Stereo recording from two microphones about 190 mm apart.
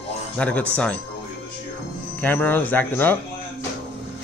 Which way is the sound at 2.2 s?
10° left (ahead or behind).